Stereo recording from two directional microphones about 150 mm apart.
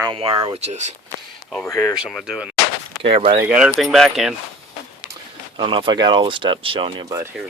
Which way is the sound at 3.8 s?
Centre (ahead or behind).